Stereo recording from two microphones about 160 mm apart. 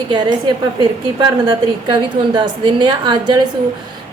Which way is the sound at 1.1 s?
30° right (ahead or behind).